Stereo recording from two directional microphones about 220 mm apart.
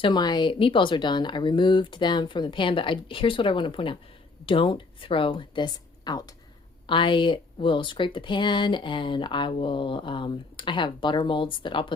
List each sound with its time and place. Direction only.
0.0 s a woman's voice: 20° left (ahead or behind)